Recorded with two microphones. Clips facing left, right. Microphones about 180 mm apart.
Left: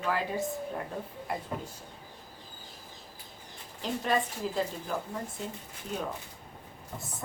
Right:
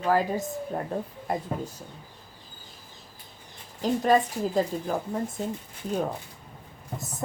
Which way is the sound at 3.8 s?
40° right (ahead or behind).